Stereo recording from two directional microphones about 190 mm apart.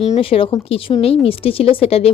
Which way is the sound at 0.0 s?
30° left (ahead or behind).